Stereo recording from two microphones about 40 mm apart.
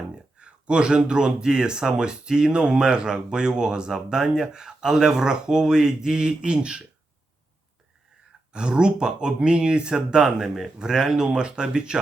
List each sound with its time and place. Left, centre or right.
0.3 s speech: right
8.5 s speech: right
10.4 s speech: centre